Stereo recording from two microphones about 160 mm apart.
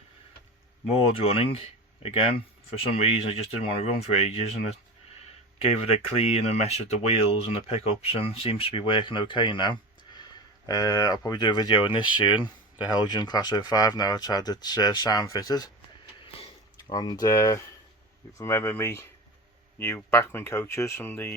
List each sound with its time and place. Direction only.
0.9 s speech: 35° left (ahead or behind)
5.8 s speech: 40° left (ahead or behind); by 19.0 s 15° left (ahead or behind)
20.1 s speech: 15° left (ahead or behind)